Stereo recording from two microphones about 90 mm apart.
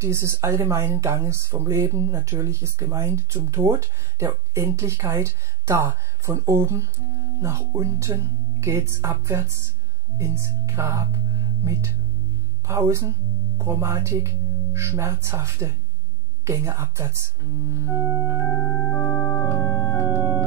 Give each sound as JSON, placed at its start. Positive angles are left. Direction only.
{"t": 0.0, "sound": "speech", "side_deg": -30}
{"t": 12.6, "sound": "speech", "side_deg": -35}
{"t": 18.4, "sound": "organ", "side_deg": 25}